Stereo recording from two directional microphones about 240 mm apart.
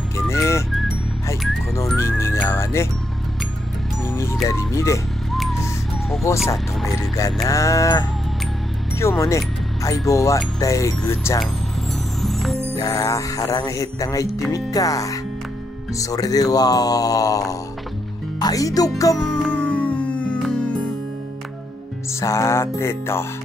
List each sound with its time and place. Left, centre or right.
0.3 s music: centre
0.7 s music: centre
1.8 s music: centre
4.0 s music: centre
4.5 s speech: centre
6.9 s speech: centre
12.2 s music: centre
12.7 s speech: centre
19.2 s music: centre
22.2 s speech: centre